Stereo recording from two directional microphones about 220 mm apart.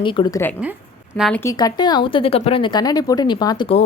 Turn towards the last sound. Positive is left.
turn(degrees=25)  # may be behind; listen again after turning